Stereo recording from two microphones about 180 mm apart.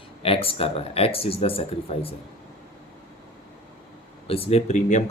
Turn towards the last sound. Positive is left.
turn(degrees=40)  # may be behind; listen again after turning